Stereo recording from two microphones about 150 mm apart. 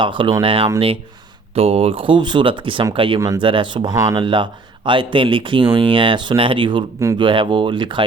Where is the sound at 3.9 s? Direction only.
20° right (ahead or behind).